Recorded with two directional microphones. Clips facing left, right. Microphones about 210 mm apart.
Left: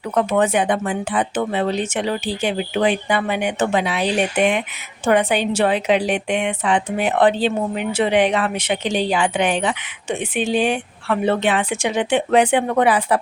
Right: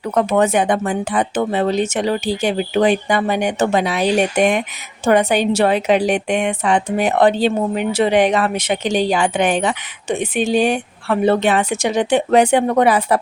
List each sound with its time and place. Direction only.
0.1 s a woman's voice: 40° right (ahead or behind)